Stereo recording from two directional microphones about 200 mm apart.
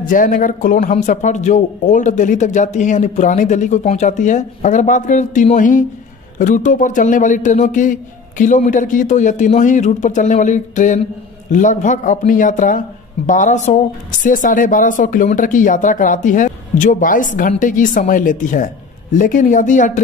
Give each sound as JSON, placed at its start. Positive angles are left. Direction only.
{"t": 0.0, "sound": "speech", "side_deg": 40}